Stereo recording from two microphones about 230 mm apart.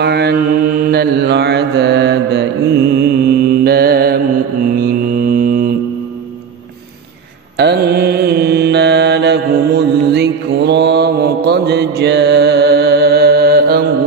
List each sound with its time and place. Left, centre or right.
0.0 s mantra: right
7.5 s mantra: right